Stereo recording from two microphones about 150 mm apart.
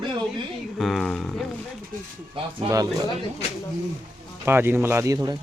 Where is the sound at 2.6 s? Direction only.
25° right (ahead or behind).